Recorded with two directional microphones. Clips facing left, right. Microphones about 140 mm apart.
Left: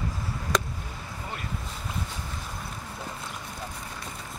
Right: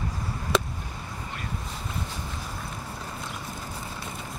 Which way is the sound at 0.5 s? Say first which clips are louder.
Right 2 dB; 5° right (ahead or behind).